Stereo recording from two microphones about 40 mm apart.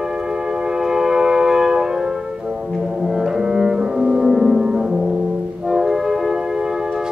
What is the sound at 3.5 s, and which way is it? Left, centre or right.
Double bass, centre.